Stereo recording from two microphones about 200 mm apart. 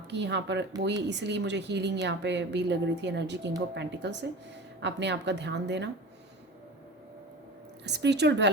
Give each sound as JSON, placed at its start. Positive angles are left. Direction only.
{"t": 0.1, "sound": "a woman's voice", "side_deg": -60}
{"t": 7.9, "sound": "a woman's voice", "side_deg": -60}